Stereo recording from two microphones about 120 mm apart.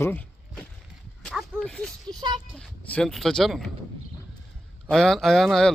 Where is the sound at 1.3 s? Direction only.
5° left (ahead or behind).